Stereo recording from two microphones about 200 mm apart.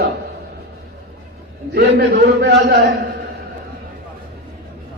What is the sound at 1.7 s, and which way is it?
A man's voice, 55° right (ahead or behind).